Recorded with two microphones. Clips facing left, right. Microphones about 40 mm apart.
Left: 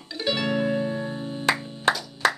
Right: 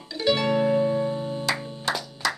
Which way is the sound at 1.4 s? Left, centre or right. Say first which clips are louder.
Left 9 dB; left.